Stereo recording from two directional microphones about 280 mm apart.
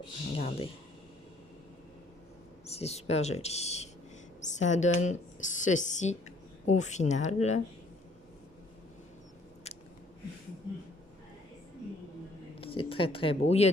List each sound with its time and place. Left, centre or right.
0.3 s speech: left
2.6 s speech: left
12.5 s speech: centre